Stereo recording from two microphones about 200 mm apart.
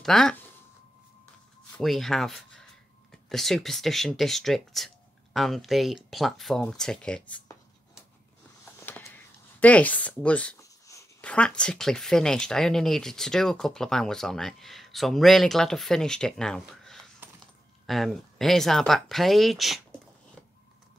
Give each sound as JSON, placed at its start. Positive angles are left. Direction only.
{"t": 0.0, "sound": "speech", "side_deg": 0}
{"t": 1.8, "sound": "speech", "side_deg": 0}
{"t": 8.7, "sound": "speech", "side_deg": 10}
{"t": 17.2, "sound": "a sound", "side_deg": -10}
{"t": 17.8, "sound": "speech", "side_deg": 0}